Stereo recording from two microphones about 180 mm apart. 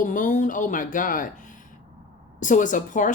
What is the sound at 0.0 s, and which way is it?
Speech, 45° left (ahead or behind).